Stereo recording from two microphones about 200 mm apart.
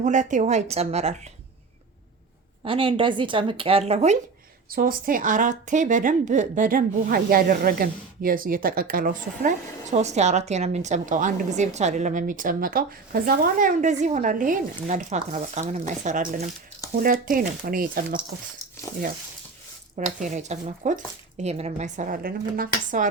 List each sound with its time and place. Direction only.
0.0 s speech: 40° right (ahead or behind)
2.6 s speech: 25° right (ahead or behind)
4.7 s speech: 45° right (ahead or behind)
20.1 s speech: 40° right (ahead or behind)